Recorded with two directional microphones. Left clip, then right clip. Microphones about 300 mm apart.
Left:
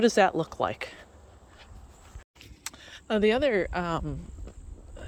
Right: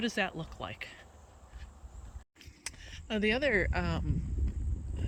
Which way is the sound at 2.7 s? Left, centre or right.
Centre.